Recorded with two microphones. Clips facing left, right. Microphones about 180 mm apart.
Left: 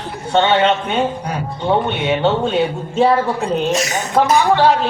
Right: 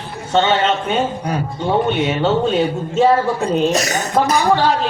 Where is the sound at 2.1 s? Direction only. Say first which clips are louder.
Even; 40° right (ahead or behind).